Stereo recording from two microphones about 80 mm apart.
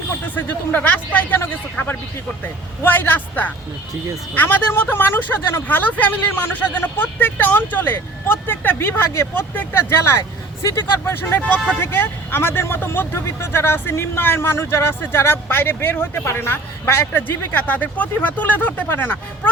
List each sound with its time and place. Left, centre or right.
0.3 s speech: left
11.0 s speech: left